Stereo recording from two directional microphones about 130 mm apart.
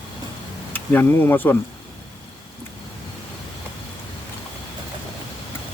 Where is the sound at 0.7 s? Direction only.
15° left (ahead or behind).